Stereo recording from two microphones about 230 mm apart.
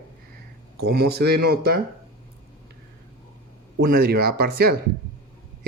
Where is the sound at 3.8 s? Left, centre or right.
Right.